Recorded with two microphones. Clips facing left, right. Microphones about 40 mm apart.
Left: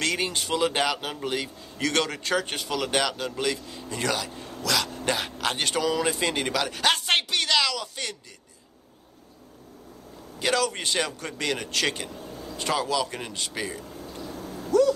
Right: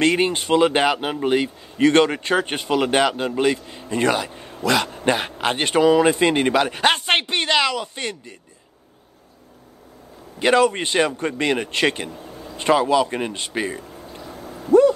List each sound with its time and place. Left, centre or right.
0.0 s speech: right
10.4 s speech: right
12.1 s vehicle: centre
12.5 s speech: right
13.8 s a sound: centre
14.7 s a sound: right